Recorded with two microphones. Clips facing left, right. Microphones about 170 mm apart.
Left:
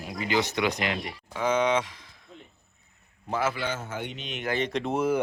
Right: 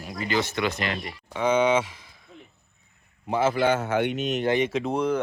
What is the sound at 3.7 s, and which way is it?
Speech, 70° right (ahead or behind).